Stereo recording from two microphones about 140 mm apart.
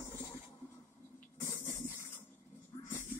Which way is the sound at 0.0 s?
15° left (ahead or behind).